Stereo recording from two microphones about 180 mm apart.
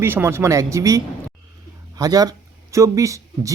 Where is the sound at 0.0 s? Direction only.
10° right (ahead or behind).